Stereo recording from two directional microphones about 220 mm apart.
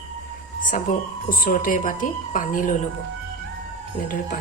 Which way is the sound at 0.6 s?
35° left (ahead or behind).